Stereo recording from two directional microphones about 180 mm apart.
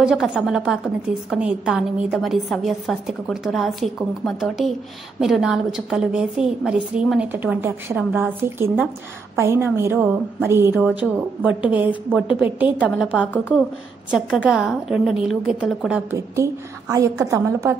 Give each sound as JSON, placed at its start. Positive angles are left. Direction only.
{"t": 0.0, "sound": "a woman's voice", "side_deg": -5}